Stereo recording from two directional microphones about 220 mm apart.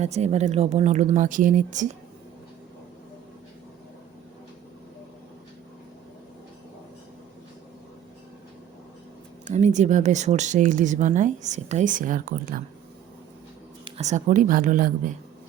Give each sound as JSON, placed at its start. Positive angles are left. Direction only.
{"t": 0.0, "sound": "speech", "side_deg": -30}
{"t": 9.4, "sound": "speech", "side_deg": -30}
{"t": 13.8, "sound": "speech", "side_deg": -30}